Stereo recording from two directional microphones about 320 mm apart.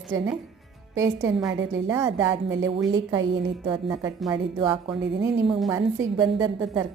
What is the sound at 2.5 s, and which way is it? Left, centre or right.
Speech, right.